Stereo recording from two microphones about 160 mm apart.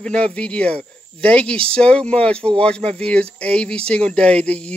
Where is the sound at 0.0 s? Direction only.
5° left (ahead or behind).